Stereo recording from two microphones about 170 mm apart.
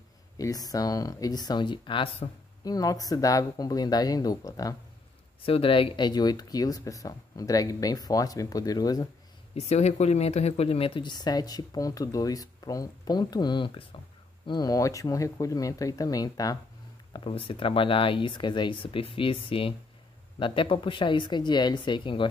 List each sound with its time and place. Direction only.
0.4 s speech: 20° left (ahead or behind)
5.4 s speech: 30° left (ahead or behind)
9.6 s speech: 40° left (ahead or behind); by 16.5 s 20° left (ahead or behind)
17.1 s speech: 30° left (ahead or behind)